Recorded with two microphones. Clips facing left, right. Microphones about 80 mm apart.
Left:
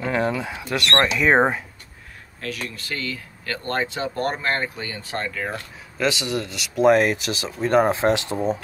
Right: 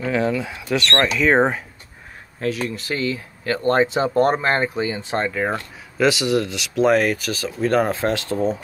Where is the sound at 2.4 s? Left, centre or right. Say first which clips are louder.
Right 8 dB; right.